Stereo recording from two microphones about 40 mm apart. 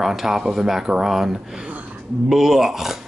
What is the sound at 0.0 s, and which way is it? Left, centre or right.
Speech, centre.